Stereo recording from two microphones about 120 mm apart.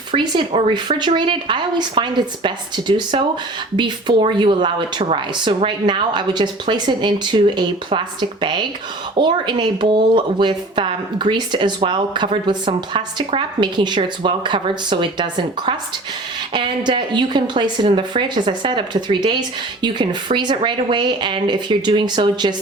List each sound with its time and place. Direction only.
0.1 s speech: 45° right (ahead or behind)